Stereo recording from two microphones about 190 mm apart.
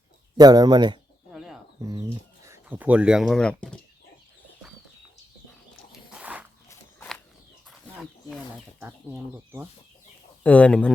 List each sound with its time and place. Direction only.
0.3 s speech: 20° right (ahead or behind)
1.3 s bird: 5° right (ahead or behind)
1.8 s speech: 20° right (ahead or behind); by 3.8 s 5° left (ahead or behind)
6.1 s walk: 5° right (ahead or behind)
8.8 s speech: 5° right (ahead or behind)
10.4 s speech: 5° left (ahead or behind)